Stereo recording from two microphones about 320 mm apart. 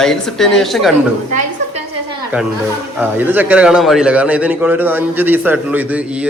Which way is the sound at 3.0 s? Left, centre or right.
Centre.